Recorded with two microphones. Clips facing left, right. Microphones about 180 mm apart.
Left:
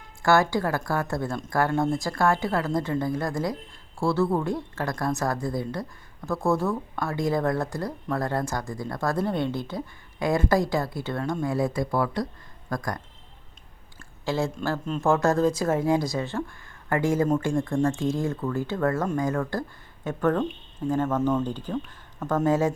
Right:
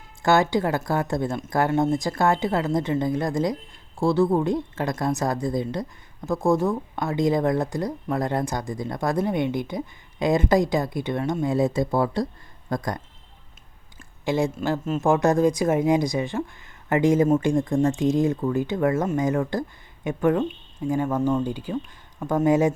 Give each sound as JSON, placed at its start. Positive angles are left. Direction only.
{"t": 0.2, "sound": "a woman's voice", "side_deg": -20}
{"t": 14.3, "sound": "a woman's voice", "side_deg": -15}